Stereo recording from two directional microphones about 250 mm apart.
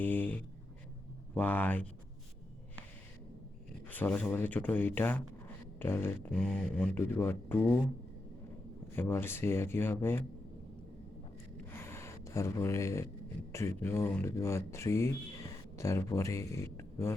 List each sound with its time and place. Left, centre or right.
0.0 s speech: centre
3.8 s speech: centre
9.0 s speech: centre
11.7 s gasp: centre
13.5 s speech: centre